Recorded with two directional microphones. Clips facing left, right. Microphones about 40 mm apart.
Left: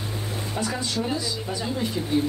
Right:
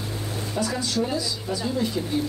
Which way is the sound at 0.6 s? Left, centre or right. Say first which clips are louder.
Right 2 dB; left.